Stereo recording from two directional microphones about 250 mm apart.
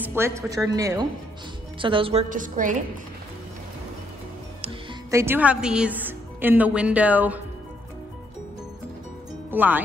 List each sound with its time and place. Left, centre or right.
0.0 s a woman's voice: centre; by 2.8 s right
5.1 s a woman's voice: centre
9.5 s speech: centre